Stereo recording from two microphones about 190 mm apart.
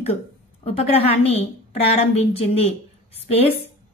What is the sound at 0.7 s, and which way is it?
A woman's voice, 30° left (ahead or behind).